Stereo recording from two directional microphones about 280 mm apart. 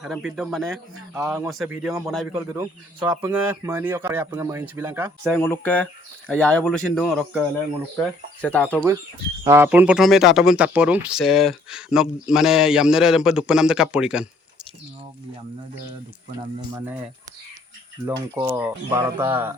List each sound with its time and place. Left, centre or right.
0.0 s speech: centre
5.3 s speech: centre
9.4 s speech: centre
16.6 s speech: centre
18.3 s speech: centre